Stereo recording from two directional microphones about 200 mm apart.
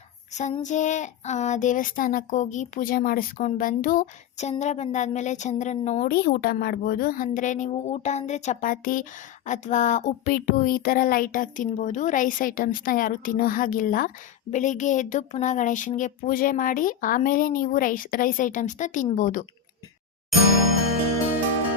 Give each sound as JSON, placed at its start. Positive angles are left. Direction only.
{"t": 0.6, "sound": "speech", "side_deg": 35}